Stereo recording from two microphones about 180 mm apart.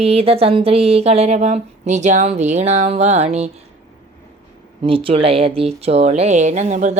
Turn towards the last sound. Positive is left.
turn(degrees=-40)  # may be behind; listen again after turning